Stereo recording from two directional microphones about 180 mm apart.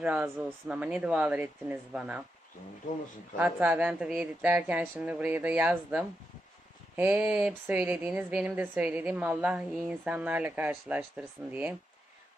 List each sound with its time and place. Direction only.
0.0 s speech: 10° right (ahead or behind)
3.3 s speech: 10° right (ahead or behind)